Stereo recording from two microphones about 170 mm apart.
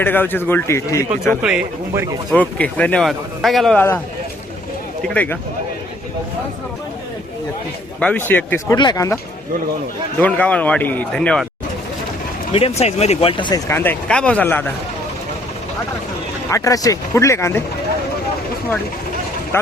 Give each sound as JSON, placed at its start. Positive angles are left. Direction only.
{"t": 0.0, "sound": "a man's voice", "side_deg": 10}
{"t": 1.4, "sound": "speech", "side_deg": -5}
{"t": 2.3, "sound": "speech", "side_deg": 5}
{"t": 3.8, "sound": "a man's voice", "side_deg": 10}
{"t": 5.0, "sound": "a man's voice", "side_deg": 10}
{"t": 7.9, "sound": "a man's voice", "side_deg": 10}
{"t": 8.7, "sound": "speech", "side_deg": 25}
{"t": 10.2, "sound": "a man's voice", "side_deg": 10}
{"t": 12.5, "sound": "speech", "side_deg": 35}
{"t": 13.7, "sound": "a man's voice", "side_deg": 15}
{"t": 16.5, "sound": "a man's voice", "side_deg": 20}